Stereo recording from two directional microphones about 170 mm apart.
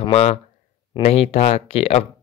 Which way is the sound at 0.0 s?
40° left (ahead or behind).